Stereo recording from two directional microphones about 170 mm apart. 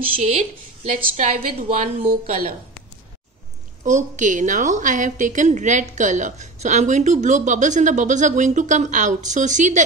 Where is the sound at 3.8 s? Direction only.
45° right (ahead or behind).